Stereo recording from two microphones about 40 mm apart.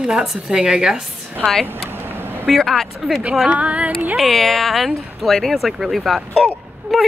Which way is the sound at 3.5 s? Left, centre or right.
Right.